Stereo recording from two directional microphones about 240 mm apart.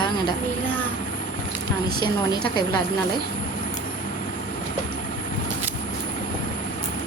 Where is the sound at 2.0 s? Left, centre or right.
Centre.